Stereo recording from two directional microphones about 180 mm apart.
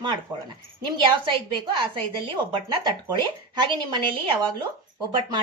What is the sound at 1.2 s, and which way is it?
Speech, 25° right (ahead or behind).